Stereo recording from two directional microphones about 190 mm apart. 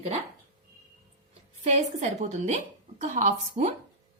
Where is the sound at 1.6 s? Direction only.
35° right (ahead or behind).